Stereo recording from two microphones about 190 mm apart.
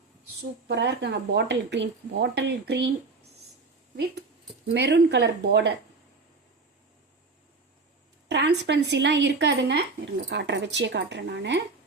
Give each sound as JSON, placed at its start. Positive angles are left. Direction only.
{"t": 0.7, "sound": "speech", "side_deg": -65}
{"t": 4.7, "sound": "speech", "side_deg": -60}
{"t": 8.3, "sound": "speech", "side_deg": -65}